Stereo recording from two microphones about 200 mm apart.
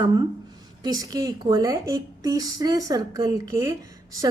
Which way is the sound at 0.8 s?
20° right (ahead or behind).